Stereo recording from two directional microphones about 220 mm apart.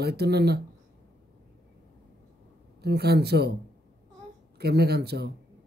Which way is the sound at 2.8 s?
45° right (ahead or behind).